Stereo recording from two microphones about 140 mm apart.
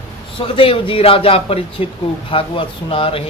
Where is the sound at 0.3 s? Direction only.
40° left (ahead or behind).